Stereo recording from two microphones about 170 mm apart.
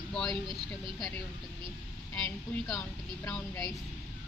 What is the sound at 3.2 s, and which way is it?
Speech, 5° left (ahead or behind).